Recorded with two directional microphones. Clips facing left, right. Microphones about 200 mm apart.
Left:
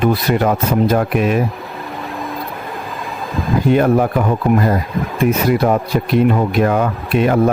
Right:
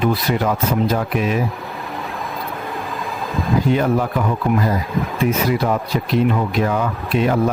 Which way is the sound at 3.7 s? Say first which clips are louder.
Left 6 dB; 55° left (ahead or behind).